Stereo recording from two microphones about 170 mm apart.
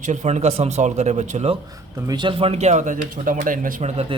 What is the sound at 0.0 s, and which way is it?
Speech, 45° right (ahead or behind).